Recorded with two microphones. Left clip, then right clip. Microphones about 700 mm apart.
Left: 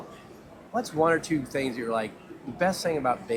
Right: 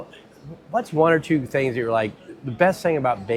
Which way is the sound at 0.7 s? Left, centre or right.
Right.